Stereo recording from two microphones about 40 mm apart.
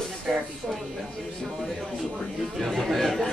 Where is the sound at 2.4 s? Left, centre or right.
Centre.